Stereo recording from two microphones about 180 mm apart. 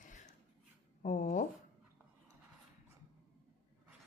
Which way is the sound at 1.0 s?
45° left (ahead or behind).